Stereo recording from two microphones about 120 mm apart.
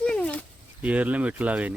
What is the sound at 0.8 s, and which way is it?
Speech, 10° right (ahead or behind).